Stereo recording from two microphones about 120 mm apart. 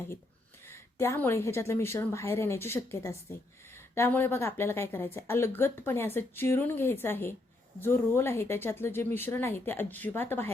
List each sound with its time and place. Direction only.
0.7 s speech: 20° left (ahead or behind)